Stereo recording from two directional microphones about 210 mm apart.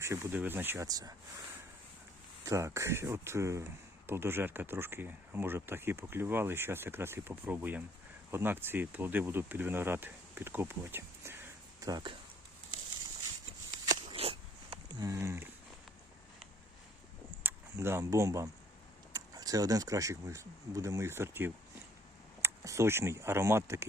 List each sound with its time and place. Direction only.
0.0 s speech: 10° right (ahead or behind)
2.4 s speech: 15° right (ahead or behind)
13.8 s a sound: 25° right (ahead or behind)
17.4 s speech: 10° right (ahead or behind)